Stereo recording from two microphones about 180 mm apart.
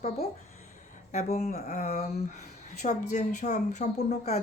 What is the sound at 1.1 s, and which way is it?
Speech, 40° left (ahead or behind).